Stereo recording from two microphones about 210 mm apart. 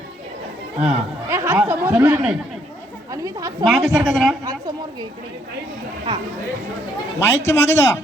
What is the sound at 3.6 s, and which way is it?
Speech, centre (ahead or behind).